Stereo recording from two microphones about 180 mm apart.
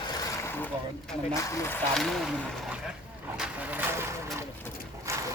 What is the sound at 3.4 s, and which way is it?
Vehicle, 10° right (ahead or behind).